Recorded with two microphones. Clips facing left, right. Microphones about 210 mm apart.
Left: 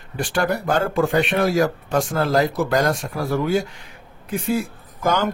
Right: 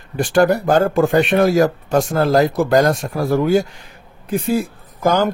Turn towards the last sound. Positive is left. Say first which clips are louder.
# right 5 dB
turn(degrees=-40)  # may be behind; listen again after turning